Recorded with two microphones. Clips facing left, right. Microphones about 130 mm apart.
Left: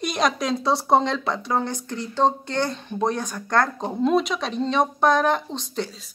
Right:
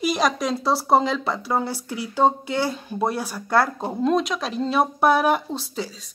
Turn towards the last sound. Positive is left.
turn(degrees=-5)  # may be behind; listen again after turning